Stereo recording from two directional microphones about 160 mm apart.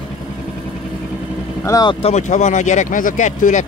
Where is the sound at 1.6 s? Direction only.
25° left (ahead or behind).